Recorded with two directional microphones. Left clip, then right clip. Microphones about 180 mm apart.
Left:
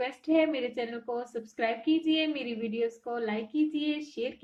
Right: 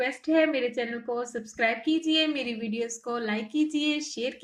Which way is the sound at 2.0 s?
50° right (ahead or behind).